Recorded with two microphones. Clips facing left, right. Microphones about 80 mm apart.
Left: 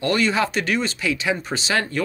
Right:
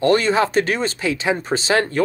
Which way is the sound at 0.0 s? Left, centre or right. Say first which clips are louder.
Right 4 dB; right.